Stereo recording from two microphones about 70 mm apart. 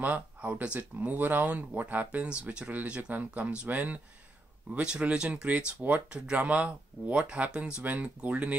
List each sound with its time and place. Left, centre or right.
0.0 s speech: right